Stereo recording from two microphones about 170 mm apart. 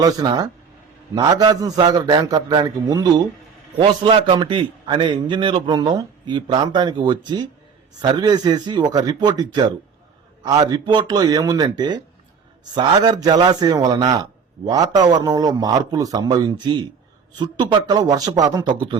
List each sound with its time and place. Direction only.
0.0 s a man's voice: 20° right (ahead or behind)